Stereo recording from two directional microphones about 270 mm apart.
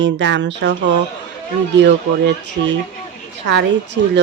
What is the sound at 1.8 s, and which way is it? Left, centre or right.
Speech, right.